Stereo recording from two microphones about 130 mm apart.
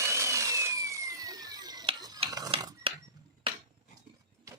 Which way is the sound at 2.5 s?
45° right (ahead or behind).